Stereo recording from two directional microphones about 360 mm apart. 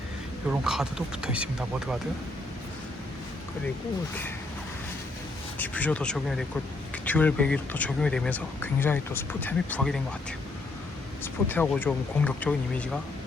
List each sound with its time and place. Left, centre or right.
0.6 s speech: centre
5.5 s speech: centre
11.2 s speech: centre